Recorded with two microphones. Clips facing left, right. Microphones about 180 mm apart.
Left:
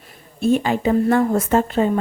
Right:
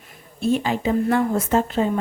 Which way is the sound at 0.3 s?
50° left (ahead or behind).